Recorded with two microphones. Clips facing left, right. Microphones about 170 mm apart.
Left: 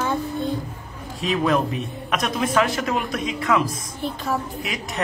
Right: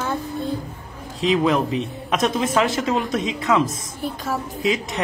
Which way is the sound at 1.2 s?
20° right (ahead or behind).